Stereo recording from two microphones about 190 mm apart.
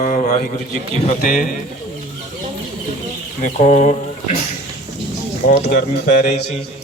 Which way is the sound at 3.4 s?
40° left (ahead or behind).